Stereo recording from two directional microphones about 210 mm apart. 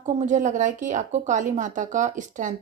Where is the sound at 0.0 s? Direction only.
35° right (ahead or behind).